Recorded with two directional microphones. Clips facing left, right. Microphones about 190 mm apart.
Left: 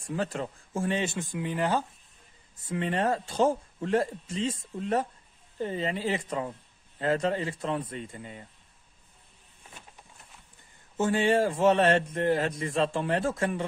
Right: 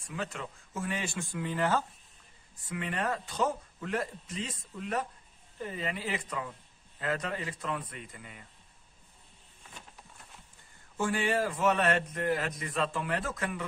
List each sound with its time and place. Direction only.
0.0 s a man's voice: 35° left (ahead or behind); by 1.9 s 15° left (ahead or behind)
2.6 s a man's voice: 30° left (ahead or behind)
11.0 s a man's voice: 25° left (ahead or behind)